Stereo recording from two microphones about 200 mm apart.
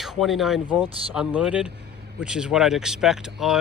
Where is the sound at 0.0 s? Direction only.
Centre (ahead or behind).